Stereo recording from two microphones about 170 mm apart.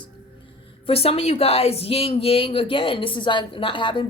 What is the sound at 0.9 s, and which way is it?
Speech, 35° left (ahead or behind).